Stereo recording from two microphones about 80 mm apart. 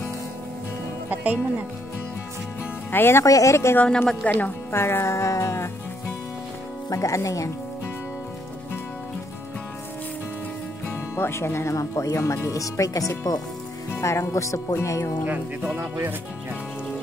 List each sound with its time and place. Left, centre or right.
1.1 s speech: centre
2.9 s speech: left
3.3 s speech: left
3.7 s speech: centre
4.7 s speech: left
10.9 s speech: left
13.8 s speech: left
15.2 s speech: right